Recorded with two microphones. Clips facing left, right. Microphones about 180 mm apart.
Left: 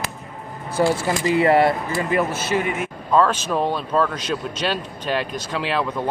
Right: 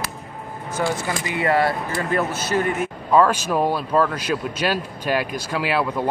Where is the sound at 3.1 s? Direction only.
10° right (ahead or behind).